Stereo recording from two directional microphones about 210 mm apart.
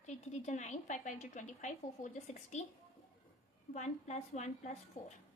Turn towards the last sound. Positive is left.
turn(degrees=40)  # may be behind; listen again after turning